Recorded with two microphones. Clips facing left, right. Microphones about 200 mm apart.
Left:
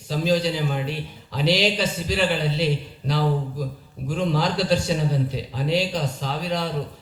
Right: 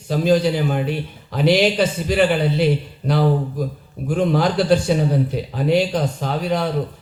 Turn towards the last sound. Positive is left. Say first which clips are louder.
# right 5 dB
turn(degrees=-55)  # may be behind; listen again after turning